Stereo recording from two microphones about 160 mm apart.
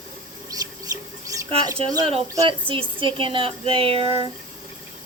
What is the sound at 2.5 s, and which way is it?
Speech, 35° right (ahead or behind).